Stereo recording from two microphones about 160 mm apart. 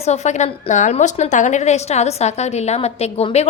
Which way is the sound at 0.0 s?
45° left (ahead or behind).